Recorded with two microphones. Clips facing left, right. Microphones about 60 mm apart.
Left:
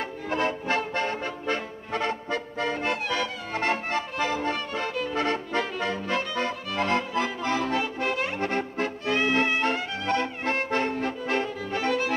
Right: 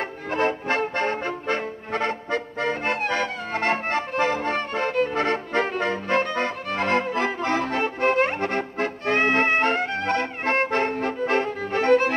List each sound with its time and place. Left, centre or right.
0.3 s music: right